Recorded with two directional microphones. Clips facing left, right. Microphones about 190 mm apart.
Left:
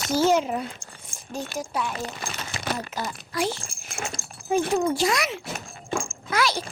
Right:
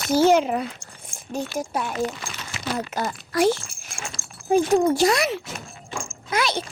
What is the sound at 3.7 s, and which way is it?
Dog, 40° left (ahead or behind).